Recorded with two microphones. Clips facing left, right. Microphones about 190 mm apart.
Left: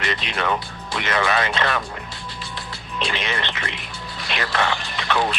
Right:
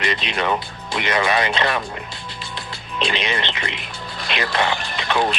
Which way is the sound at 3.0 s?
20° right (ahead or behind).